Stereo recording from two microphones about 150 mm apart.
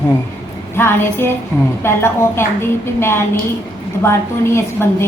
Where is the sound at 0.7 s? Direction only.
15° left (ahead or behind).